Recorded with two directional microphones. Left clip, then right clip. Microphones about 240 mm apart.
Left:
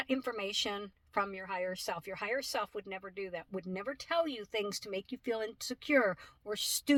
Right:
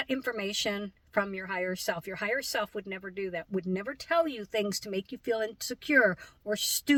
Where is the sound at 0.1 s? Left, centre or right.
Left.